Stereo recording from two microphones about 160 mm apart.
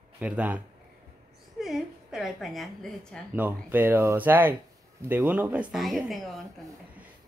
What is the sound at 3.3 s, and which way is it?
Speech, 10° right (ahead or behind).